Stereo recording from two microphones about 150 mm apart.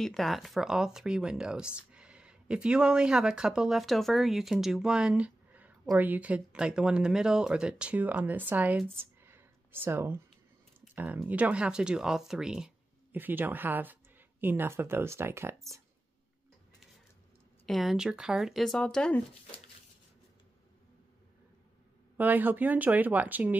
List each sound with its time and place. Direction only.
0.0 s speech: centre (ahead or behind); by 10.2 s 15° right (ahead or behind)
11.2 s speech: 10° right (ahead or behind)
17.6 s speech: centre (ahead or behind)
22.1 s speech: 10° right (ahead or behind)